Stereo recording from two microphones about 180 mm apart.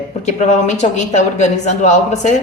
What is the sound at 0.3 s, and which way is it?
Speech, 40° left (ahead or behind).